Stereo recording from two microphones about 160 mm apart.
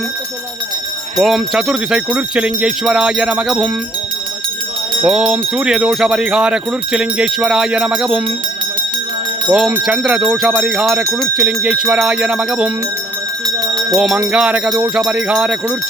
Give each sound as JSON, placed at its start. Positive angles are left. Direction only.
{"t": 1.2, "sound": "speech", "side_deg": -5}
{"t": 5.0, "sound": "speech", "side_deg": -5}
{"t": 9.5, "sound": "speech", "side_deg": -5}
{"t": 13.6, "sound": "a sound", "side_deg": -20}
{"t": 14.3, "sound": "speech", "side_deg": -5}